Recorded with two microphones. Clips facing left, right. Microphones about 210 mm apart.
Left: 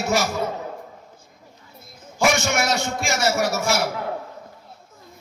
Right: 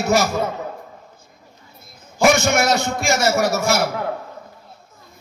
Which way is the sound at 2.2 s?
45° right (ahead or behind).